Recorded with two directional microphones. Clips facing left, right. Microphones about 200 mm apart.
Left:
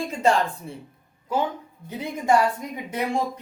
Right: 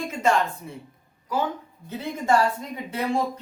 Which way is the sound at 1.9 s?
15° left (ahead or behind).